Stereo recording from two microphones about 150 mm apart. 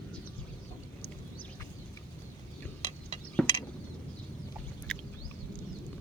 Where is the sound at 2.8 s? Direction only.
50° right (ahead or behind).